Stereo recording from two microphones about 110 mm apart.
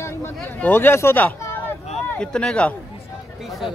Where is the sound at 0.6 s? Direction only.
20° left (ahead or behind).